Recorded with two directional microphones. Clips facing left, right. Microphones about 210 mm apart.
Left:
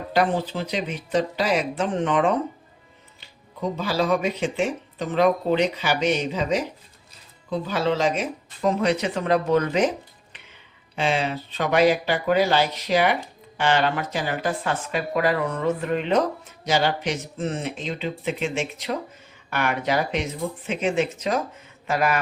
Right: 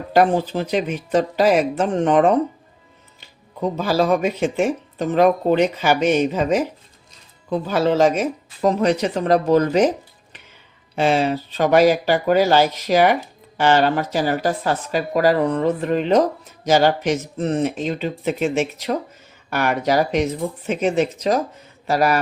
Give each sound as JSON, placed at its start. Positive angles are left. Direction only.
{"t": 0.1, "sound": "speech", "side_deg": -45}
{"t": 3.8, "sound": "speech", "side_deg": -45}
{"t": 10.9, "sound": "speech", "side_deg": -40}